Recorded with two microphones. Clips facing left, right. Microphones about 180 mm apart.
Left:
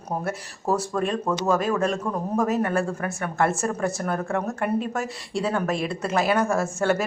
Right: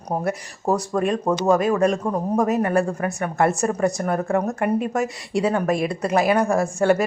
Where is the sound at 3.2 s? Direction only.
15° right (ahead or behind).